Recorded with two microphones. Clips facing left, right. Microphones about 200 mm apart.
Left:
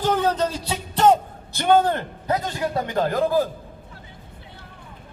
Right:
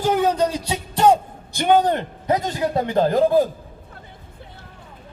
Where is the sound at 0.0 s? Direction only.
10° right (ahead or behind).